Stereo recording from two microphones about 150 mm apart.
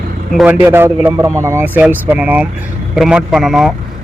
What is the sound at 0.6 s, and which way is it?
Speech, 15° right (ahead or behind).